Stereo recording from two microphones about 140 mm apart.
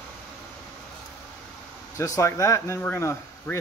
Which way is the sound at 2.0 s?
20° left (ahead or behind).